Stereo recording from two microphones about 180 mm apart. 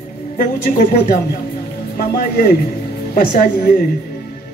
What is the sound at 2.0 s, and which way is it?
A man's voice, 55° left (ahead or behind).